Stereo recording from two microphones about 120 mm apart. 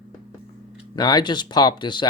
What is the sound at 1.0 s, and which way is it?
Speech, 35° left (ahead or behind).